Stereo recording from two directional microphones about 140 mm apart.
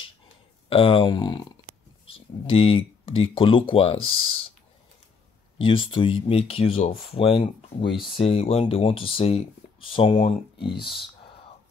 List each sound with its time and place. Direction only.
0.7 s speech: 40° left (ahead or behind)
2.0 s speech: 40° left (ahead or behind)
5.6 s speech: 40° left (ahead or behind)